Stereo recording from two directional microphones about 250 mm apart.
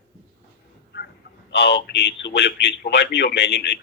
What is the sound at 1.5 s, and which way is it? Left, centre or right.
A man's voice, left.